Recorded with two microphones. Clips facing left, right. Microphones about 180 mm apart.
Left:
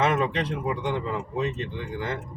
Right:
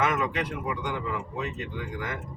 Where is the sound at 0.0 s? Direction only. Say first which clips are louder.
Left 3 dB; 30° left (ahead or behind).